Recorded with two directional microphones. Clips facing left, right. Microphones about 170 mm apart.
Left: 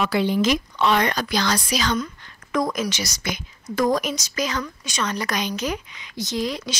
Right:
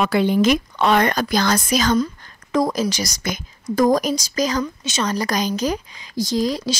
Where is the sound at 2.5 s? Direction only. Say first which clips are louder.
Right 4 dB; 35° right (ahead or behind).